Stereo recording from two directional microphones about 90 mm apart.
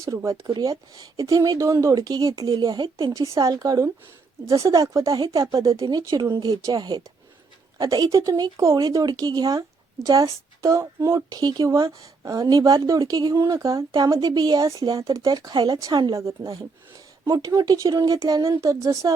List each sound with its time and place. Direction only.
0.0 s speech: 35° right (ahead or behind)
2.5 s speech: 55° right (ahead or behind)
3.3 s a woman's voice: 40° right (ahead or behind)
13.3 s a woman's voice: 35° right (ahead or behind); by 16.1 s 50° right (ahead or behind)
16.1 s a woman's voice: 35° right (ahead or behind)